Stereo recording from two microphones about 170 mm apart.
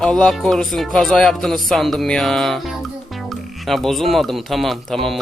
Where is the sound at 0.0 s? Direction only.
5° left (ahead or behind).